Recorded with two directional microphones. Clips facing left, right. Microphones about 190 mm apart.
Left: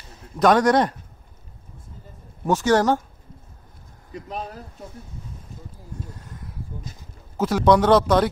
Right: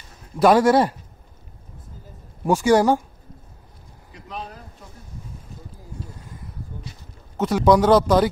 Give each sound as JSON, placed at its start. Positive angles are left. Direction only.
{"t": 0.4, "sound": "a man's voice", "side_deg": -5}
{"t": 2.4, "sound": "a man's voice", "side_deg": -10}
{"t": 4.1, "sound": "speech", "side_deg": 45}
{"t": 6.1, "sound": "a sound", "side_deg": 0}
{"t": 7.3, "sound": "a man's voice", "side_deg": 0}